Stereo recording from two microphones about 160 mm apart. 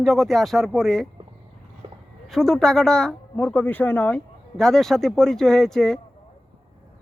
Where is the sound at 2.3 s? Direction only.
Centre (ahead or behind).